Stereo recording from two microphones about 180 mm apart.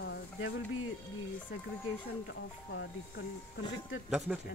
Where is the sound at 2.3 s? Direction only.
85° left.